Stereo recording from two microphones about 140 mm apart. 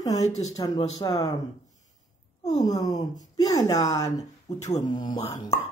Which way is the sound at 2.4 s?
25° left (ahead or behind).